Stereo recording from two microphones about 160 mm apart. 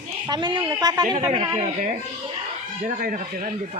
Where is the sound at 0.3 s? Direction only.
30° right (ahead or behind).